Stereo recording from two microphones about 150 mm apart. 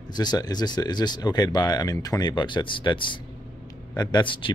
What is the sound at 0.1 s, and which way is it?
Speech, 30° left (ahead or behind).